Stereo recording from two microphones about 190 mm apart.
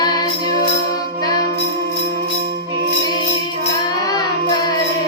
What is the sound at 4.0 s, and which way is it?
Child singing, 20° left (ahead or behind).